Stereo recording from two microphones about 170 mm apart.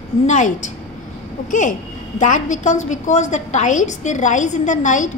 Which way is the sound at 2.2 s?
45° left (ahead or behind).